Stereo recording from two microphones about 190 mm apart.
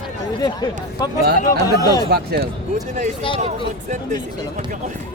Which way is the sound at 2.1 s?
60° right (ahead or behind).